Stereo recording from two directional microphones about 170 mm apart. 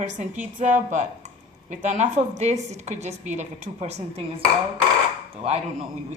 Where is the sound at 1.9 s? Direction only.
45° right (ahead or behind).